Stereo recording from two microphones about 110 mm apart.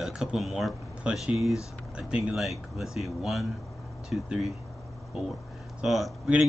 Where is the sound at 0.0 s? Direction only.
5° right (ahead or behind).